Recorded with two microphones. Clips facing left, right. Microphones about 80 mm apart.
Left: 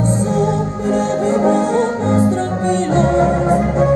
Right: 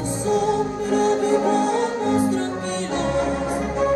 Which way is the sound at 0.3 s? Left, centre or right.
Left.